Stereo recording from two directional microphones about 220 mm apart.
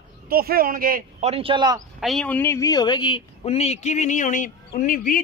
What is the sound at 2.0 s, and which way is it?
Speech, centre (ahead or behind).